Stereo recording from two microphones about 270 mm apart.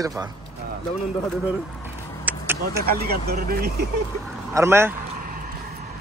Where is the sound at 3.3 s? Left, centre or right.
Right.